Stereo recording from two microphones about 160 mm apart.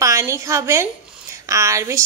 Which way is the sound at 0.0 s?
20° right (ahead or behind).